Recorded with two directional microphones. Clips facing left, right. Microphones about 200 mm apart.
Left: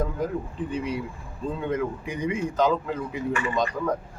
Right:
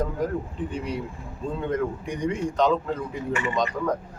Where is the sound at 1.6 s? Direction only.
5° left (ahead or behind).